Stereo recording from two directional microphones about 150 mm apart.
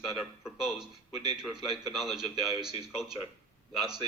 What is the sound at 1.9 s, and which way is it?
Speech, 5° right (ahead or behind).